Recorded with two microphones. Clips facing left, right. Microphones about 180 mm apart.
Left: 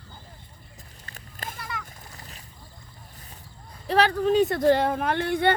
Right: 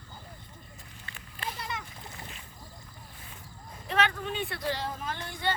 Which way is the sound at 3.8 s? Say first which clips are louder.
Left 8 dB; 35° left (ahead or behind).